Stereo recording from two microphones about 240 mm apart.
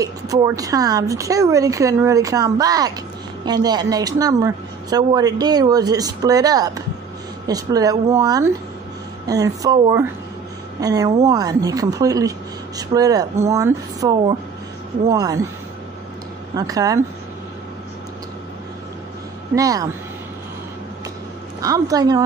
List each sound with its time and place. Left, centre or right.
0.0 s a woman's voice: centre
16.5 s a woman's voice: centre
19.5 s a woman's voice: centre
21.5 s a woman's voice: centre